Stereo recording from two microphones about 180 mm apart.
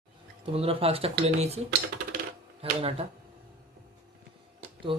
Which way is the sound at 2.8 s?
35° right (ahead or behind).